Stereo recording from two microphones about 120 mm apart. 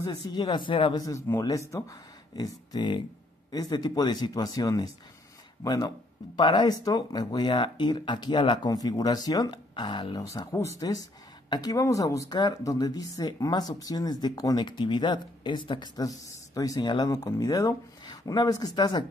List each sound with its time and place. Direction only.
0.0 s speech: 35° left (ahead or behind)
1.0 s speech: 25° left (ahead or behind)
10.4 s speech: 25° left (ahead or behind); by 15.9 s 40° left (ahead or behind)
16.0 s speech: 30° left (ahead or behind)